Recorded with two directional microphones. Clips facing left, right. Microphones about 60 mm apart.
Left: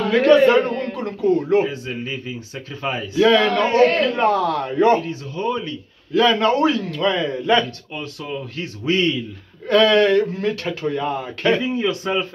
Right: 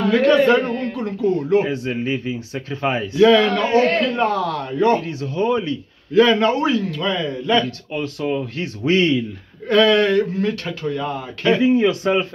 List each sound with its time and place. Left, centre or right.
0.1 s a man's voice: centre
1.7 s speech: right
3.2 s a man's voice: centre
5.0 s a man's voice: right
6.1 s a man's voice: centre
7.9 s speech: right
9.7 s a man's voice: centre
11.6 s speech: right